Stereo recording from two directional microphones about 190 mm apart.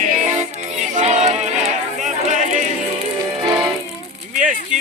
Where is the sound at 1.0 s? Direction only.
35° right (ahead or behind).